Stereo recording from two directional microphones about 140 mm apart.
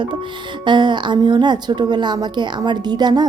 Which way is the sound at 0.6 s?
35° right (ahead or behind).